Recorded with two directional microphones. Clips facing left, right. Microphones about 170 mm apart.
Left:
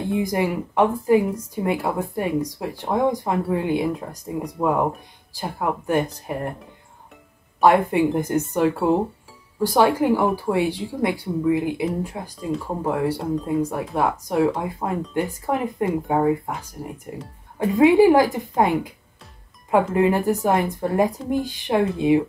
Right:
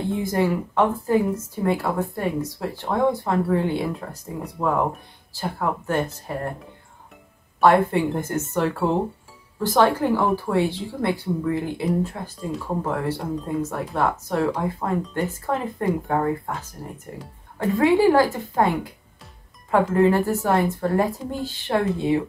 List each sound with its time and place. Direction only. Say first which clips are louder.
0.1 s a woman's voice: left 1 dB; 15° left (ahead or behind)
7.6 s a woman's voice: left 1 dB; 15° left (ahead or behind)
12.4 s speech: left 3 dB; centre (ahead or behind)
12.8 s a woman's voice: left 3 dB; 10° left (ahead or behind)
19.9 s a woman's voice: right 1 dB; 15° left (ahead or behind)